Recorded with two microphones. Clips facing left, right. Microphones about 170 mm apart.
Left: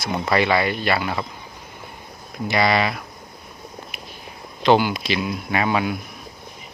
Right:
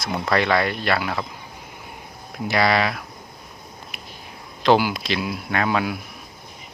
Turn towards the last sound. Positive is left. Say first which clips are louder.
# left 1 dB
turn(degrees=5)  # may be behind; listen again after turning